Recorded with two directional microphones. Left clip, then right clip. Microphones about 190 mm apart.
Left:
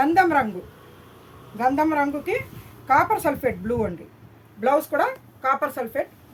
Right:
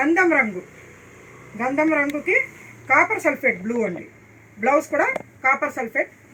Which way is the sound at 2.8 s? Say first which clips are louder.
Right 1 dB; 45° left (ahead or behind).